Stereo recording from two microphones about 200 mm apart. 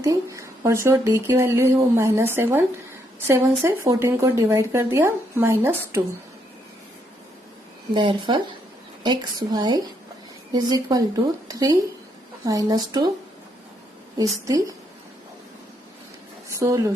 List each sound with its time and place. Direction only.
0.0 s speech: 15° right (ahead or behind)
7.9 s a woman's voice: 25° right (ahead or behind)
14.4 s speech: 15° right (ahead or behind)
16.6 s speech: 15° right (ahead or behind)